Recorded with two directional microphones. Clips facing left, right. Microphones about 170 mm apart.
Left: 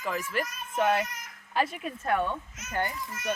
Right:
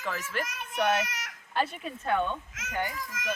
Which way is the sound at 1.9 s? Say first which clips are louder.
Even; 25° right (ahead or behind).